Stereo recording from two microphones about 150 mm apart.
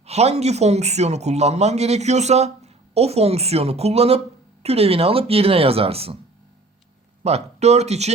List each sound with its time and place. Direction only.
0.0 s speech: 45° right (ahead or behind)
7.3 s speech: 45° right (ahead or behind)